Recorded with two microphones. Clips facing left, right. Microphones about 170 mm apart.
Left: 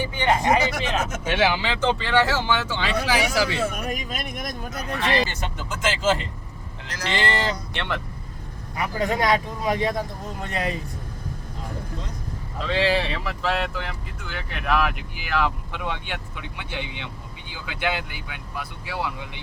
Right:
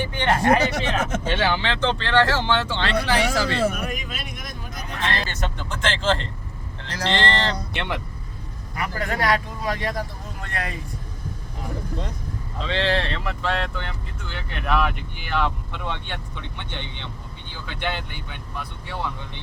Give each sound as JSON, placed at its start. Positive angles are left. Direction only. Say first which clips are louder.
{"t": 0.2, "sound": "speech", "louder": "right 1 dB", "side_deg": 10}
{"t": 3.8, "sound": "speech", "louder": "left 2 dB", "side_deg": 45}
{"t": 4.9, "sound": "speech", "louder": "left 3 dB", "side_deg": 10}
{"t": 6.8, "sound": "vehicle", "louder": "right 4 dB", "side_deg": -30}
{"t": 7.1, "sound": "speech", "louder": "right 1 dB", "side_deg": 10}
{"t": 7.7, "sound": "speech", "louder": "right 1 dB", "side_deg": -10}
{"t": 8.7, "sound": "speech", "louder": "left 3 dB", "side_deg": 20}
{"t": 12.5, "sound": "speech", "louder": "left 1 dB", "side_deg": 5}